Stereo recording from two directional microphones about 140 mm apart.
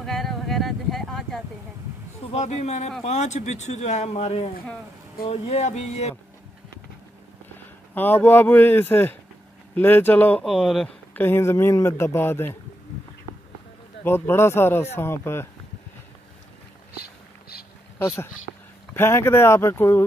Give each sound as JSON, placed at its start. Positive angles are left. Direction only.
{"t": 0.0, "sound": "a sound", "side_deg": 0}
{"t": 2.3, "sound": "a man's voice", "side_deg": 55}
{"t": 7.9, "sound": "a man's voice", "side_deg": 15}
{"t": 10.4, "sound": "speech", "side_deg": 5}
{"t": 11.1, "sound": "a man's voice", "side_deg": 15}
{"t": 14.0, "sound": "a man's voice", "side_deg": 15}
{"t": 16.9, "sound": "a sound", "side_deg": 90}
{"t": 17.9, "sound": "a man's voice", "side_deg": 20}